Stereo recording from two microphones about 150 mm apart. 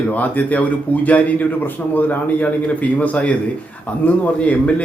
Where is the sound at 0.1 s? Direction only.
10° left (ahead or behind).